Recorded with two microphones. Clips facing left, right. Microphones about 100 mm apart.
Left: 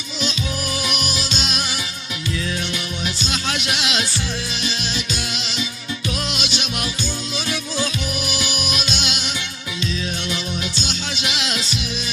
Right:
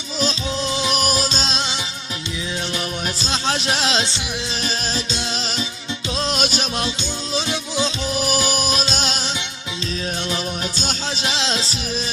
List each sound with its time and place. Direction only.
0.2 s music: 35° right (ahead or behind)
0.7 s music: 25° right (ahead or behind)
0.9 s music: 40° right (ahead or behind); by 1.8 s 25° right (ahead or behind)
3.2 s speech: 30° right (ahead or behind)
6.1 s music: 40° right (ahead or behind)
6.7 s music: 25° right (ahead or behind)
10.8 s music: 40° right (ahead or behind)